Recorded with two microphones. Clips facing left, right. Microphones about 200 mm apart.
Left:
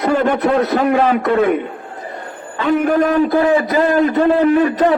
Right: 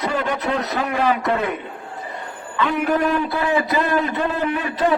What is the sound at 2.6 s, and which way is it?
A man's voice, 45° left (ahead or behind).